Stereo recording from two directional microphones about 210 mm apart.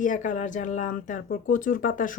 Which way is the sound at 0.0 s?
35° left (ahead or behind).